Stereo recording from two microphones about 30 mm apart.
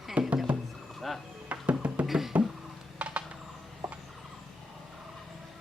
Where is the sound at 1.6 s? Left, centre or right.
Right.